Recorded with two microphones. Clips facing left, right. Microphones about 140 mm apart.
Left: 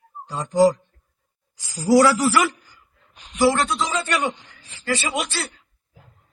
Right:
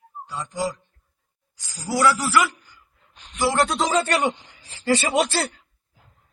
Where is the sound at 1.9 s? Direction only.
35° left (ahead or behind).